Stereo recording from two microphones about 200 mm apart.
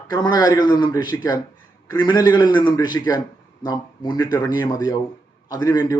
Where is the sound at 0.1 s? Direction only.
20° left (ahead or behind).